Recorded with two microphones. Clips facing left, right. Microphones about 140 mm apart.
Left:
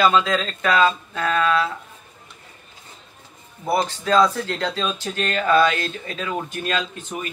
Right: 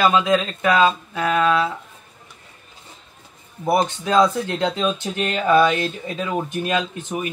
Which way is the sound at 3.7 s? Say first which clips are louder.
Right 1 dB; 20° right (ahead or behind).